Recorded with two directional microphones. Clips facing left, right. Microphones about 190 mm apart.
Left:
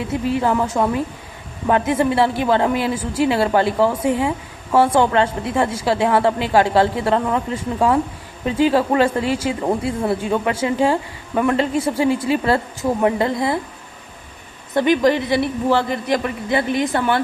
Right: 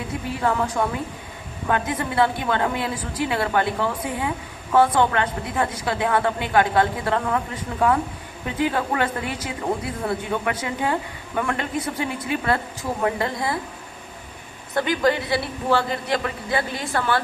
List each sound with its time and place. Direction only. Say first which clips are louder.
0.1 s a woman's voice: left 5 dB; 25° left (ahead or behind)
14.8 s a woman's voice: left 5 dB; 20° left (ahead or behind)